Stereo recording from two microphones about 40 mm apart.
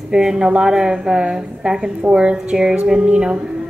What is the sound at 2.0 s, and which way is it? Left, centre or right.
Speech, right.